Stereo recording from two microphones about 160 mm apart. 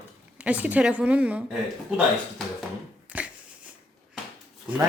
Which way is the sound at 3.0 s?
5° right (ahead or behind).